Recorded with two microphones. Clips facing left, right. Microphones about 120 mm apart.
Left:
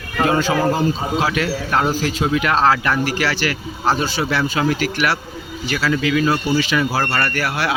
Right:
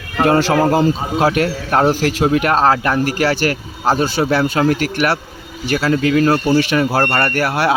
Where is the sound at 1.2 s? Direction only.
50° right (ahead or behind).